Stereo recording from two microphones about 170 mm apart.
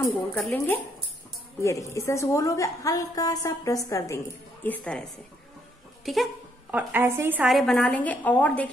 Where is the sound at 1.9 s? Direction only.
15° left (ahead or behind).